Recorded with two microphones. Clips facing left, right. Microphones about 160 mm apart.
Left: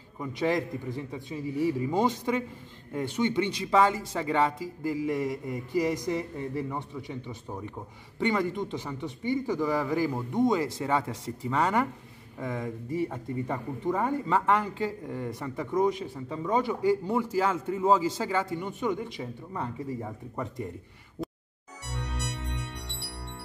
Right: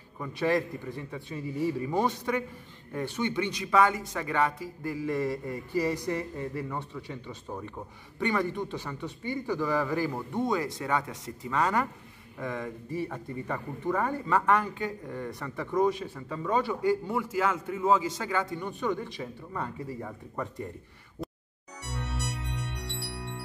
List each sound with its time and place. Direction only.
0.2 s speech: 20° left (ahead or behind)
5.0 s a man's voice: 15° left (ahead or behind)
21.8 s music: centre (ahead or behind)